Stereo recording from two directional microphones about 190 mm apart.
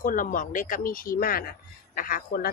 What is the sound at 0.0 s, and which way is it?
A woman's voice, 45° left (ahead or behind).